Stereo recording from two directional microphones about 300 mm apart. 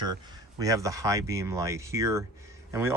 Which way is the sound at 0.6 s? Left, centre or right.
Centre.